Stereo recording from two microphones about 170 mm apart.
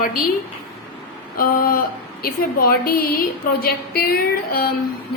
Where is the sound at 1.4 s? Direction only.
55° left (ahead or behind).